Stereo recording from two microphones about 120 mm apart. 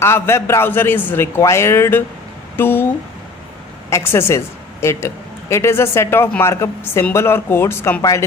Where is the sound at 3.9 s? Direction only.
20° left (ahead or behind).